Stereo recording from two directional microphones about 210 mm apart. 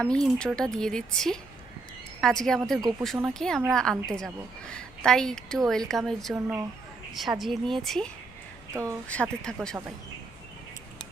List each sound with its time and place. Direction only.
0.0 s a woman's voice: 5° left (ahead or behind)
6.3 s speech: 10° right (ahead or behind)
7.1 s a woman's voice: centre (ahead or behind)
8.7 s a woman's voice: 15° right (ahead or behind)
9.0 s a woman's voice: 5° left (ahead or behind)